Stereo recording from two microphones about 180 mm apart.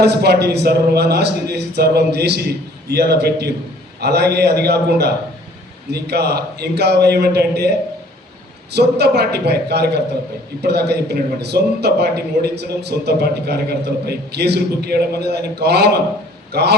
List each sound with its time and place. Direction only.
0.0 s a man's voice: 65° right (ahead or behind)
8.7 s a man's voice: 65° right (ahead or behind)